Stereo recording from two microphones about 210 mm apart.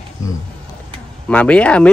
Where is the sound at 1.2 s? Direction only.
5° left (ahead or behind).